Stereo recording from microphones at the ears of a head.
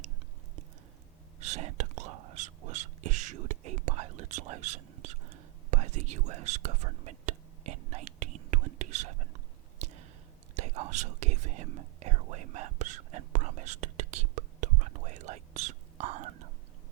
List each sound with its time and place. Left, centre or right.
1.4 s whispering: right